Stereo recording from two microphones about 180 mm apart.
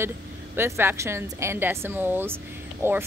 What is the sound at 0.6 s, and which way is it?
Speech, 15° right (ahead or behind).